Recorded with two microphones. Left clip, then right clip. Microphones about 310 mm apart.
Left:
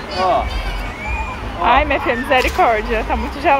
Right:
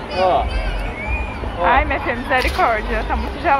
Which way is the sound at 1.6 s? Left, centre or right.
Centre.